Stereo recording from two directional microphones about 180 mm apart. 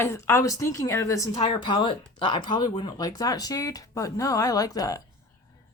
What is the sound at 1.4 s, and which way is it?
Speech, 30° left (ahead or behind).